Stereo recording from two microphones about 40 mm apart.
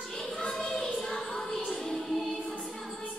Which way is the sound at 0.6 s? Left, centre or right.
Centre.